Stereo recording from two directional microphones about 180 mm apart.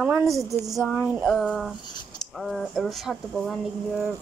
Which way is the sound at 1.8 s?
25° left (ahead or behind).